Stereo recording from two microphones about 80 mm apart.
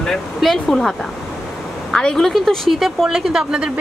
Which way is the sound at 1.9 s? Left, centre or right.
Centre.